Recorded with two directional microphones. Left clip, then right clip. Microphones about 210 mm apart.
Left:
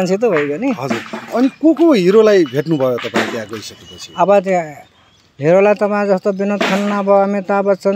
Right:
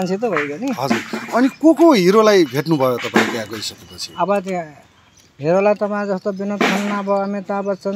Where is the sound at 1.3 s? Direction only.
15° left (ahead or behind).